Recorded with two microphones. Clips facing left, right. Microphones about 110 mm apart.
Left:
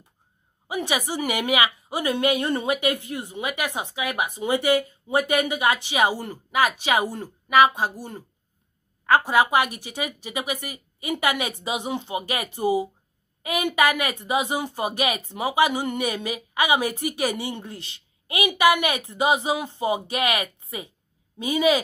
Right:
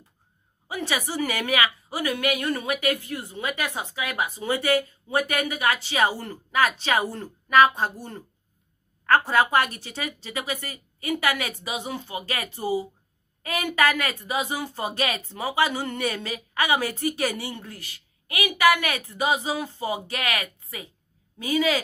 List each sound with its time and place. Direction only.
0.7 s a woman's voice: 15° left (ahead or behind)